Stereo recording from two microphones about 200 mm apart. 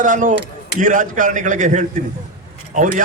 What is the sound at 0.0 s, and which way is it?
A man's voice, 40° right (ahead or behind).